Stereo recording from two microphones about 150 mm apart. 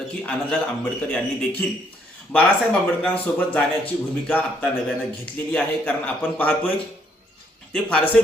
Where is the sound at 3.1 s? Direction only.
10° left (ahead or behind).